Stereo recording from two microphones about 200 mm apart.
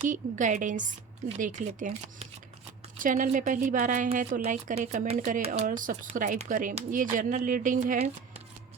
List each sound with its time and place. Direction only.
0.0 s a woman's voice: 40° right (ahead or behind)